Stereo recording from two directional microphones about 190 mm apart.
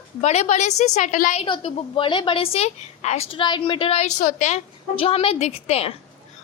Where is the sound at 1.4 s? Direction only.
25° left (ahead or behind).